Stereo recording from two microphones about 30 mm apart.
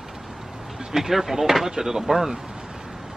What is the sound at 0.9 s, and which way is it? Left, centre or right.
Speech, centre.